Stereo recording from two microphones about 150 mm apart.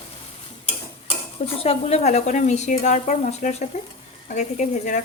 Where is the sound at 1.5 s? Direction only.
40° left (ahead or behind).